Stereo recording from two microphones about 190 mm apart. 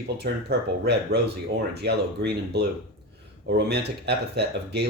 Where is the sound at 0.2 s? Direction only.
60° right (ahead or behind).